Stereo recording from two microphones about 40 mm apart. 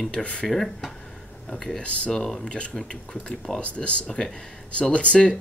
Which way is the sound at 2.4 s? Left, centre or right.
Left.